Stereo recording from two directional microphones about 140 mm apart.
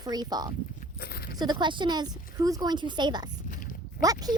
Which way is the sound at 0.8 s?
90° left.